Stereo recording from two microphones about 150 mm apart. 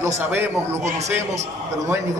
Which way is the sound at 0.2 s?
15° right (ahead or behind).